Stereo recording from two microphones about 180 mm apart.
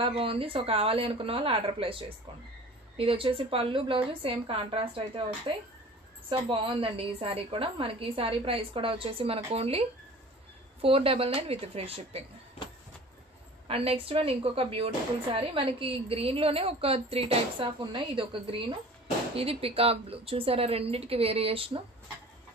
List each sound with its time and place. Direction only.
0.0 s a woman's voice: 30° right (ahead or behind)
6.3 s a woman's voice: 30° right (ahead or behind)
13.7 s a woman's voice: 30° right (ahead or behind)